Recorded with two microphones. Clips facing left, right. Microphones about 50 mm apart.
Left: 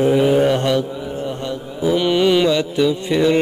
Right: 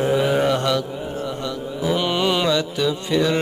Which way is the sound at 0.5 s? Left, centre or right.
Left.